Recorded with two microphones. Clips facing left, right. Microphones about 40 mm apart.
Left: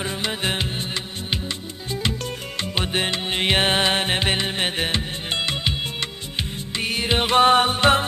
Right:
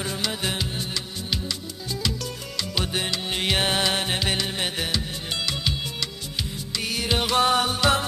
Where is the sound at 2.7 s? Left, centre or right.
Left.